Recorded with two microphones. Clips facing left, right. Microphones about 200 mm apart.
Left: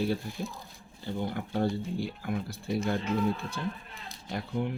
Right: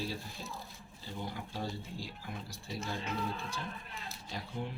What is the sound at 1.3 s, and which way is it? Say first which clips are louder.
Speech: left 10 dB; 60° left (ahead or behind).